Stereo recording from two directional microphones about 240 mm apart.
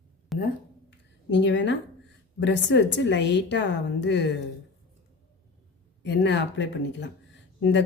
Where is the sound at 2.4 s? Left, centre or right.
Left.